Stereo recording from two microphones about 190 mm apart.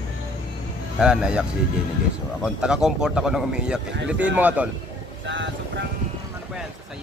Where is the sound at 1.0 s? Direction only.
5° right (ahead or behind).